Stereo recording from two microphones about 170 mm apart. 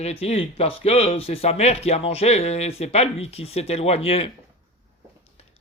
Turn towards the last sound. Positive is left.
turn(degrees=35)  # may be behind; listen again after turning